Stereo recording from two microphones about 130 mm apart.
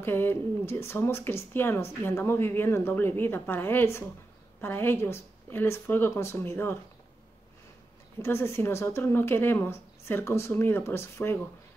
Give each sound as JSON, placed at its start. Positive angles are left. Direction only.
{"t": 0.0, "sound": "speech", "side_deg": 15}
{"t": 8.2, "sound": "speech", "side_deg": 20}